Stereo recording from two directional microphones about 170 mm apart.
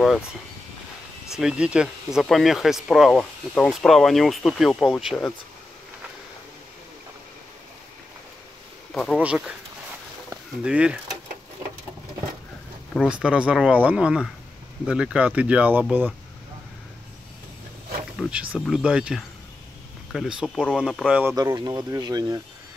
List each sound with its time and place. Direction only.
1.3 s speech: 5° right (ahead or behind)
8.9 s speech: centre (ahead or behind)
10.6 s speech: 5° right (ahead or behind)
13.0 s speech: 5° right (ahead or behind)
18.3 s speech: 5° right (ahead or behind)
21.2 s speech: 20° right (ahead or behind)